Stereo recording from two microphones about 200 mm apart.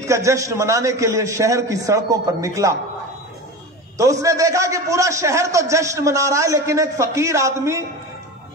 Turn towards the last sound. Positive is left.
turn(degrees=-15)  # may be behind; listen again after turning